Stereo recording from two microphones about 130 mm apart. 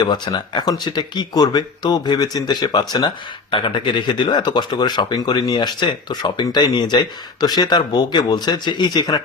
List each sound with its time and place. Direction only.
0.0 s speech: 35° left (ahead or behind)